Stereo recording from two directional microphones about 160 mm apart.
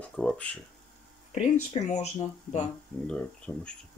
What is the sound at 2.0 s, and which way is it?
Speech, 45° left (ahead or behind).